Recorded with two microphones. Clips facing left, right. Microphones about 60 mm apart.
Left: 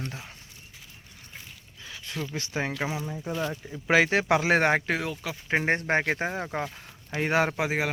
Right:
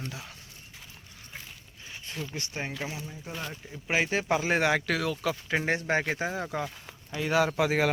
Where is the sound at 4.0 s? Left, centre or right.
Left.